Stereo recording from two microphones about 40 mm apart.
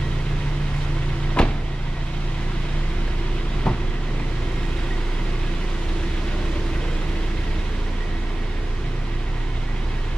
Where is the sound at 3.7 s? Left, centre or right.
Centre.